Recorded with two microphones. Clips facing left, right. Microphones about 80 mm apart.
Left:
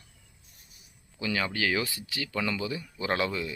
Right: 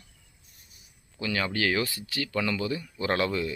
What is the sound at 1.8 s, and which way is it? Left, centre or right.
Speech, left.